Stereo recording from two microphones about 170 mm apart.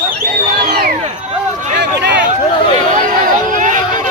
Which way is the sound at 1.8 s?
90° right.